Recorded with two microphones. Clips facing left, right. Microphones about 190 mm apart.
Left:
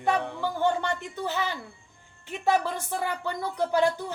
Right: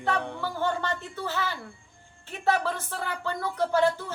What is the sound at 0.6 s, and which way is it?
A woman's voice, 15° left (ahead or behind).